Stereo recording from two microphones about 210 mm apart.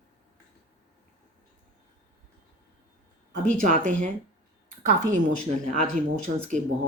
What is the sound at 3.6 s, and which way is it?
Speech, 40° right (ahead or behind).